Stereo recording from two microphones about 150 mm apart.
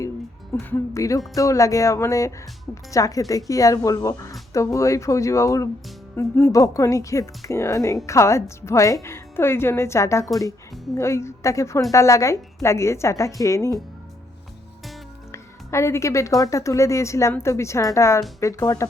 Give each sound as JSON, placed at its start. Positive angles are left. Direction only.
{"t": 0.6, "sound": "speech", "side_deg": 15}
{"t": 15.3, "sound": "speech", "side_deg": 20}